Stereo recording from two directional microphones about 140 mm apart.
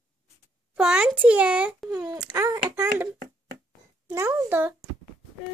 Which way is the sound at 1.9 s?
25° right (ahead or behind).